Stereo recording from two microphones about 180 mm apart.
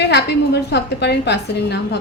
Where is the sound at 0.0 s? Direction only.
65° left (ahead or behind).